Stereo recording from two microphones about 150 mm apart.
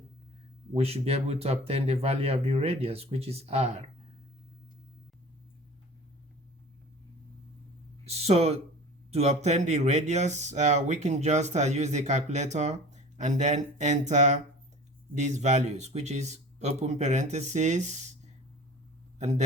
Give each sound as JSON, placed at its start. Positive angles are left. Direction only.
{"t": 0.7, "sound": "speech", "side_deg": -45}
{"t": 8.0, "sound": "a sound", "side_deg": -45}
{"t": 9.0, "sound": "speech", "side_deg": -45}